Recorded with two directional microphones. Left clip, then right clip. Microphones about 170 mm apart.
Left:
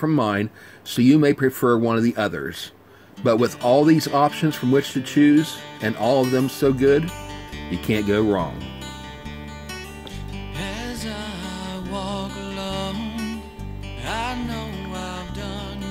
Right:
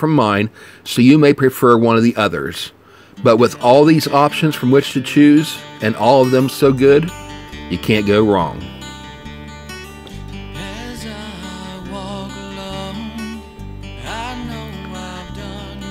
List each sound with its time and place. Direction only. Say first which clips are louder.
0.0 s speech: right 7 dB; 40° right (ahead or behind)
10.6 s music: even; centre (ahead or behind)